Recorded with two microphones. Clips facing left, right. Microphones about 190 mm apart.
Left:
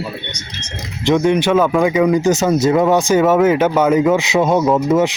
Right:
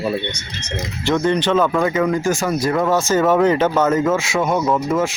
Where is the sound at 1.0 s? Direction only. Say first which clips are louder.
Left 4 dB; 10° left (ahead or behind).